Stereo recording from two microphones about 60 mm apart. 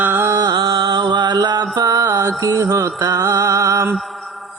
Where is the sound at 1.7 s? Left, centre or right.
Right.